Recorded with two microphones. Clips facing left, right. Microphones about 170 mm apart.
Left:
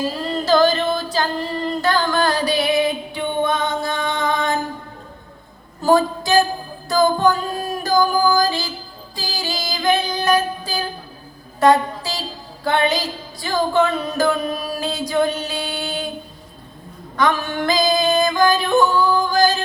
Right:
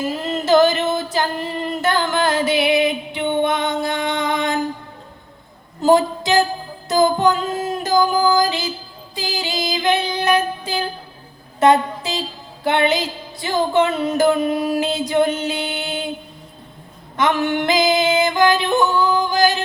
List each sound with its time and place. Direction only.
0.0 s music: 20° right (ahead or behind)
5.8 s a sound: 20° right (ahead or behind)
6.8 s music: 20° right (ahead or behind)
9.1 s child singing: 20° right (ahead or behind)
11.6 s music: 20° right (ahead or behind)
12.6 s a sound: 20° right (ahead or behind)
17.2 s yodeling: 20° right (ahead or behind)